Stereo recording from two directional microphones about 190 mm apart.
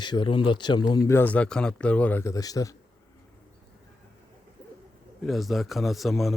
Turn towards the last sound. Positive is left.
turn(degrees=0)  # may be behind; listen again after turning